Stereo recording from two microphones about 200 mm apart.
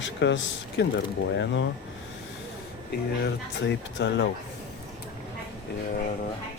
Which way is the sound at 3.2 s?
60° left (ahead or behind).